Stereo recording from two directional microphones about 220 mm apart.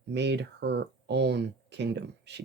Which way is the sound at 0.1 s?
50° right (ahead or behind).